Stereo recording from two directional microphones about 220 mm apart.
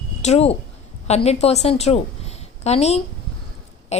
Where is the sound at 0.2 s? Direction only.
30° left (ahead or behind).